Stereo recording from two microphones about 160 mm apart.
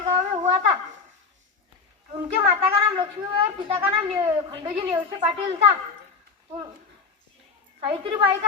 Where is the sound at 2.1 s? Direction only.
35° right (ahead or behind).